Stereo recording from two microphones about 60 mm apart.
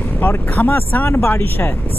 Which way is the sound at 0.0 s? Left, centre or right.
Left.